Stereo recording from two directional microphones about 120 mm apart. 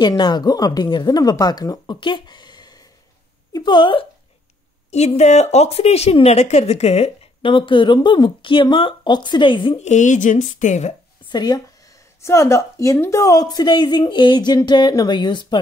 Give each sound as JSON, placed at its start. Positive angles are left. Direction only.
{"t": 0.0, "sound": "a woman's voice", "side_deg": 40}
{"t": 4.9, "sound": "a woman's voice", "side_deg": 70}
{"t": 7.4, "sound": "speech", "side_deg": 45}
{"t": 9.8, "sound": "speech", "side_deg": 90}
{"t": 11.2, "sound": "speech", "side_deg": 35}
{"t": 12.2, "sound": "a woman's voice", "side_deg": 25}